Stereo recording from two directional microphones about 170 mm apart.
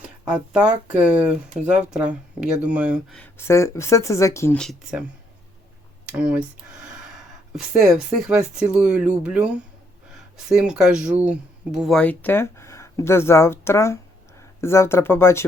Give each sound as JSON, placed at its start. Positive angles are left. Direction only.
{"t": 0.9, "sound": "speech", "side_deg": -5}
{"t": 3.2, "sound": "speech", "side_deg": 15}
{"t": 4.5, "sound": "speech", "side_deg": 0}
{"t": 6.1, "sound": "speech", "side_deg": -5}
{"t": 10.5, "sound": "speech", "side_deg": -5}